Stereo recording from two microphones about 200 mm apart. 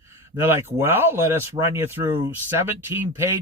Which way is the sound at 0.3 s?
10° right (ahead or behind).